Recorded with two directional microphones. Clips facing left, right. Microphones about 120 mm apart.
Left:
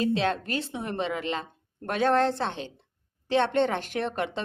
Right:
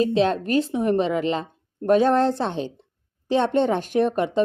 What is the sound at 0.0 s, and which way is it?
Speech, 20° right (ahead or behind).